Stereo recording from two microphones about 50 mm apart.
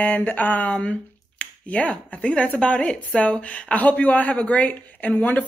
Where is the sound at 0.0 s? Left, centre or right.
Left.